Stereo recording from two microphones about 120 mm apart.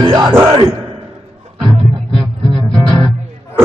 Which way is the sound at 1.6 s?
40° right (ahead or behind).